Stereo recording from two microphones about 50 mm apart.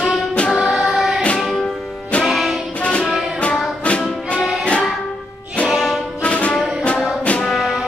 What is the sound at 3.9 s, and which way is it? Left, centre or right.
Music, left.